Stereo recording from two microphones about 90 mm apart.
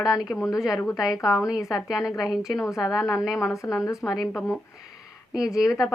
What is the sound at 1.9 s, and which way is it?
Speech, 5° right (ahead or behind).